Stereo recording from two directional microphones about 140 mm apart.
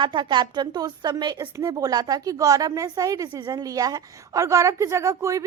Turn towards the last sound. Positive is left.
turn(degrees=-20)  # may be behind; listen again after turning